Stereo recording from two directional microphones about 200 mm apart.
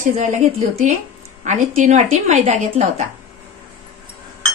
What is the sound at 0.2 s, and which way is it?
A woman's voice, 35° right (ahead or behind).